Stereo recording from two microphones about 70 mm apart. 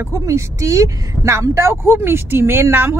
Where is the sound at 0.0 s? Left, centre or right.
Right.